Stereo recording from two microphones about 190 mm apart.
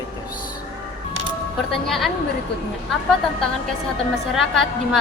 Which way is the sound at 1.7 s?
Centre (ahead or behind).